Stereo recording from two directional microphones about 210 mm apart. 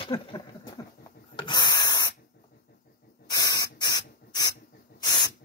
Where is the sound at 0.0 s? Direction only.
20° left (ahead or behind).